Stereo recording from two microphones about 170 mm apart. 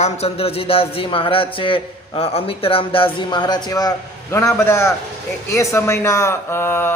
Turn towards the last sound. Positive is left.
turn(degrees=15)  # may be behind; listen again after turning